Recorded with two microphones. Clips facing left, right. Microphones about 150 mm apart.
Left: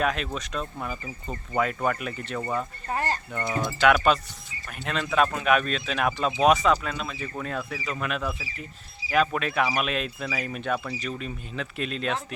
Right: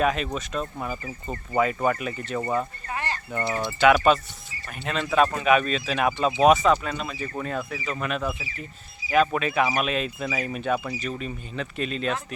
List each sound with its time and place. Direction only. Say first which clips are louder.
0.0 s speech: right 3 dB; centre (ahead or behind)
2.8 s a sound: left 3 dB; 40° left (ahead or behind)
3.8 s speech: right 3 dB; centre (ahead or behind)